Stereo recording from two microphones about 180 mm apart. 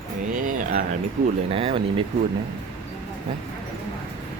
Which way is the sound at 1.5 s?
30° right (ahead or behind).